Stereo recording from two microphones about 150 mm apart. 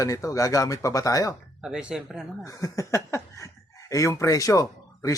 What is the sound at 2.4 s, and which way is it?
Speech, 20° left (ahead or behind).